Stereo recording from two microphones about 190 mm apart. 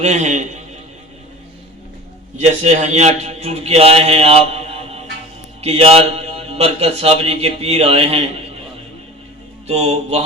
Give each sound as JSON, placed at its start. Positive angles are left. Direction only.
{"t": 0.0, "sound": "a man's voice", "side_deg": -35}
{"t": 2.4, "sound": "a man's voice", "side_deg": -35}
{"t": 9.6, "sound": "a man's voice", "side_deg": -35}